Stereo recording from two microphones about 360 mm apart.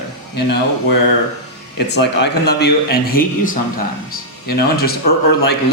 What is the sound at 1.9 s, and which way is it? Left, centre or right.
Speech, left.